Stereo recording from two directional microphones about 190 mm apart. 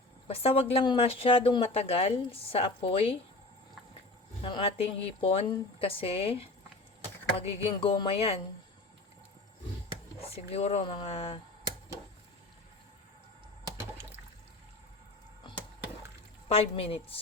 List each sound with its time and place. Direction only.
0.3 s speech: 30° left (ahead or behind)
4.4 s speech: 30° left (ahead or behind)
10.2 s a sound: 30° left (ahead or behind)
10.5 s speech: 35° left (ahead or behind)
16.5 s speech: 30° left (ahead or behind)